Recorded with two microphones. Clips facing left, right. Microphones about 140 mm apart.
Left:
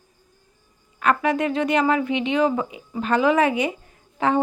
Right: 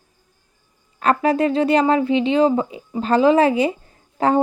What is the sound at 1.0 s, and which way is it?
Speech, 35° right (ahead or behind).